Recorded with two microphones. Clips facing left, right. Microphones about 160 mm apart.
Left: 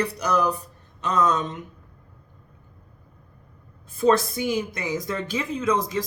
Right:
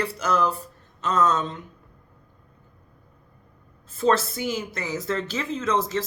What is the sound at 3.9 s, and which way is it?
Speech, 15° left (ahead or behind).